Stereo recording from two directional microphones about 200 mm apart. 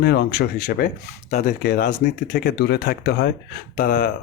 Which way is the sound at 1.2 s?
35° left (ahead or behind).